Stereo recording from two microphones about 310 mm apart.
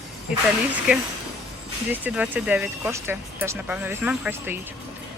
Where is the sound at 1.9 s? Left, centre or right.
Centre.